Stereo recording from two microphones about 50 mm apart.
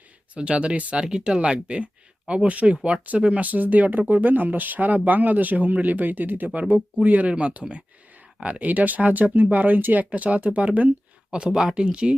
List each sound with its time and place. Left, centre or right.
0.3 s speech: right
11.3 s speech: centre